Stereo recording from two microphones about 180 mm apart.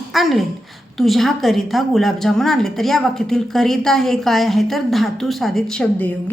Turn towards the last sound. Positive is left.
turn(degrees=10)  # may be behind; listen again after turning